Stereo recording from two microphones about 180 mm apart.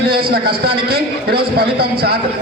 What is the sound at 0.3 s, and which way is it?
A man's voice, 55° right (ahead or behind).